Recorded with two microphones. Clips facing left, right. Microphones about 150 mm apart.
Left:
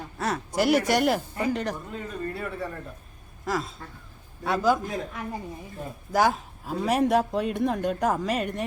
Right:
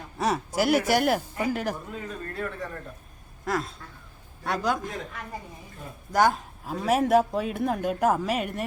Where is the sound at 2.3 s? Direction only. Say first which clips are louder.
Left 1 dB; 5° left (ahead or behind).